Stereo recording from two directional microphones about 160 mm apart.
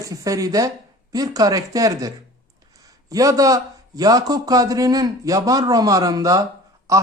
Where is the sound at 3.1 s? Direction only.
20° right (ahead or behind).